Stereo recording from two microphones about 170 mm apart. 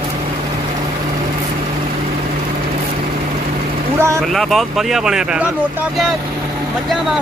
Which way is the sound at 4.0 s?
15° right (ahead or behind).